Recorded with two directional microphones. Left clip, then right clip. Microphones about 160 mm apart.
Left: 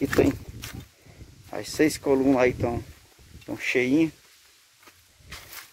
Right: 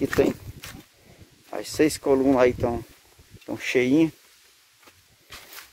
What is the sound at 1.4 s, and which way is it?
Speech, 5° right (ahead or behind).